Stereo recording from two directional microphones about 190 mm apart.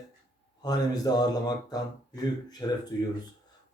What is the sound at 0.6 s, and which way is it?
A man's voice, 20° left (ahead or behind).